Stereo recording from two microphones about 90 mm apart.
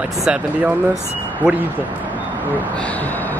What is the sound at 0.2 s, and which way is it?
Speech, 10° right (ahead or behind).